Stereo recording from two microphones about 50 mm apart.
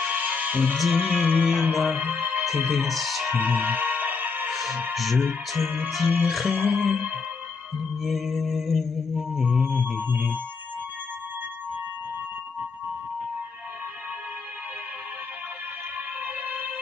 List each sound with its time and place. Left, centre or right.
0.0 s music: right
1.4 s music: centre
2.0 s music: right
2.4 s speech: centre
3.3 s music: right
4.5 s music: centre
8.0 s music: centre
16.4 s music: right